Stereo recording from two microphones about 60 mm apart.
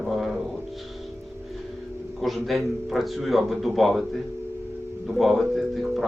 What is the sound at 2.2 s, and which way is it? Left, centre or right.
A man's voice, centre.